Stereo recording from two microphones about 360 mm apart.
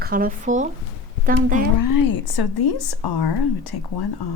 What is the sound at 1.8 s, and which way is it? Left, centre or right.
Speech, left.